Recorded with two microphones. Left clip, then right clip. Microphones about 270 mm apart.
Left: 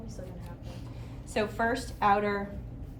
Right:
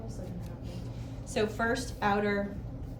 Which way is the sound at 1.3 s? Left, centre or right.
Left.